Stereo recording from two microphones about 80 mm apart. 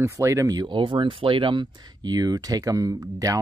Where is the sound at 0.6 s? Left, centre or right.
Right.